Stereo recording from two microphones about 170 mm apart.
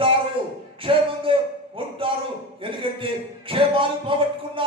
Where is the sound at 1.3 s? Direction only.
30° right (ahead or behind).